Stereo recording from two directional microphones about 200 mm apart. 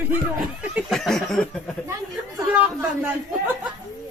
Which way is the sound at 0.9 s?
Centre (ahead or behind).